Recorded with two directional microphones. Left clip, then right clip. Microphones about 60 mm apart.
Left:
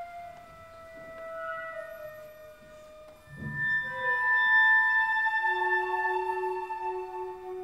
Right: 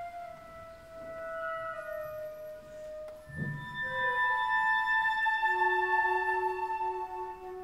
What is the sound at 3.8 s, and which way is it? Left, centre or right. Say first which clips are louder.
Music: left 2 dB; centre.